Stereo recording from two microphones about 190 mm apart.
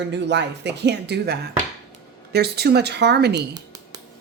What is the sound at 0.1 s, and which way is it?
Speech, 65° right (ahead or behind).